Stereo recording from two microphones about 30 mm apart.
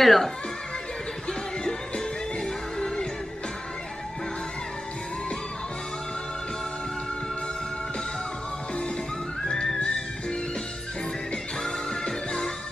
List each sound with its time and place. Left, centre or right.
0.0 s speech: centre
2.4 s music: left